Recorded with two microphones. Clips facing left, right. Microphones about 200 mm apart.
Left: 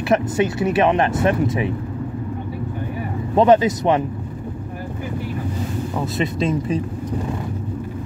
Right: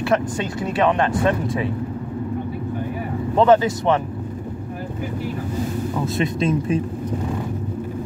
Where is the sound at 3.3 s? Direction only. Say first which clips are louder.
Left 1 dB; 15° left (ahead or behind).